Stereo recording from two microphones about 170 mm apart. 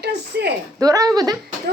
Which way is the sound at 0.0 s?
80° right.